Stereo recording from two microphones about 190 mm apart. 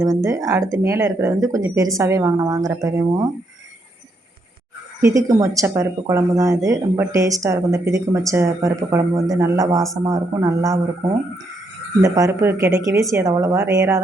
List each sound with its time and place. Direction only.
0.0 s speech: 15° right (ahead or behind)
5.0 s speech: 15° right (ahead or behind)
12.0 s speech: 15° right (ahead or behind)